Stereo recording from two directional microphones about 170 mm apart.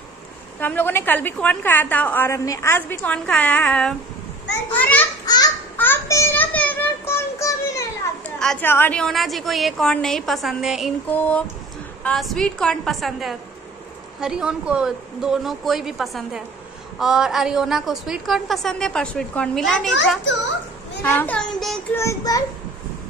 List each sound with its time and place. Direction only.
0.6 s a woman's voice: 10° left (ahead or behind)
5.2 s a sound: 20° left (ahead or behind)
8.4 s a woman's voice: 5° left (ahead or behind)
11.1 s a woman's voice: 10° left (ahead or behind)
21.0 s a woman's voice: 10° left (ahead or behind)
21.9 s a child's voice: 20° left (ahead or behind)